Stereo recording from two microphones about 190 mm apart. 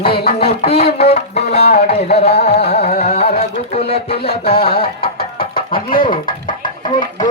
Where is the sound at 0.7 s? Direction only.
35° left (ahead or behind).